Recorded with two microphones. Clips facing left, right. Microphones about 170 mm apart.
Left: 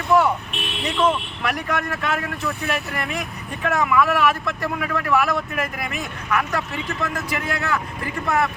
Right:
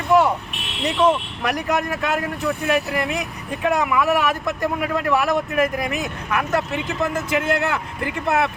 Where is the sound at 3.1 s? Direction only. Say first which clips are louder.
Right 3 dB; 20° right (ahead or behind).